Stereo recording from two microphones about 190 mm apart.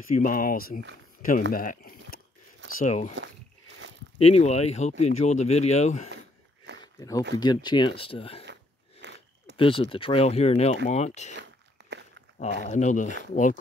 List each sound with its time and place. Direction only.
0.1 s speech: 45° left (ahead or behind)
2.7 s speech: 40° left (ahead or behind)
4.2 s speech: 35° left (ahead or behind)
6.8 s a sound: 20° left (ahead or behind)
7.3 s speech: 20° left (ahead or behind)
9.0 s biting: 65° right (ahead or behind)
9.6 s speech: 30° left (ahead or behind)
11.3 s biting: 65° right (ahead or behind)
12.4 s speech: 40° left (ahead or behind)